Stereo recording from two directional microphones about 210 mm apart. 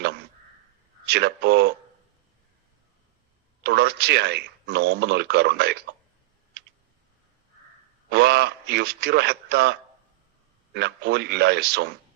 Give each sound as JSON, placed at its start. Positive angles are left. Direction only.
{"t": 1.0, "sound": "speech", "side_deg": -50}
{"t": 3.6, "sound": "speech", "side_deg": -50}
{"t": 8.1, "sound": "speech", "side_deg": -50}
{"t": 10.8, "sound": "speech", "side_deg": -50}